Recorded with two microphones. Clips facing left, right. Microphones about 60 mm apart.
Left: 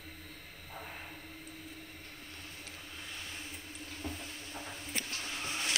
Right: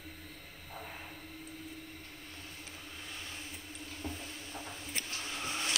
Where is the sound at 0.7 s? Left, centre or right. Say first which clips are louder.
Even; centre.